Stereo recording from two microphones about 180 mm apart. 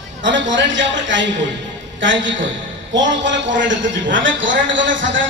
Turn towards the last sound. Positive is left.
turn(degrees=-90)